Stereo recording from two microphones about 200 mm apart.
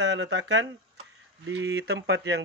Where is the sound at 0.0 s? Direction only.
65° right (ahead or behind).